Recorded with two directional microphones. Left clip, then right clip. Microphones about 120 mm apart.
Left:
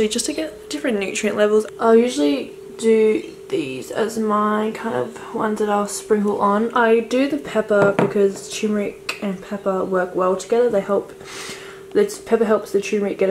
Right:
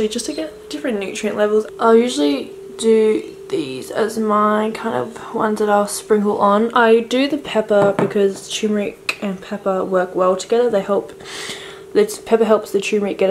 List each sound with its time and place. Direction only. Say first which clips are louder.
0.0 s speech: even; 5° left (ahead or behind)
1.8 s speech: right 3 dB; 10° right (ahead or behind)